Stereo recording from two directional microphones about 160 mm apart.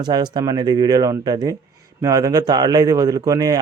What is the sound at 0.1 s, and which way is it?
A man's voice, 25° right (ahead or behind).